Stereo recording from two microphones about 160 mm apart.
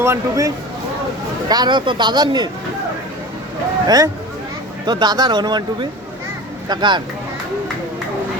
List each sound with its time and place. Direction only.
0.0 s speech: 20° right (ahead or behind)
3.8 s speech: 25° right (ahead or behind)